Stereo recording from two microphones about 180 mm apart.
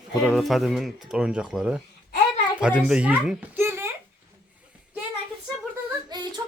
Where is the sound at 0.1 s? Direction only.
Centre (ahead or behind).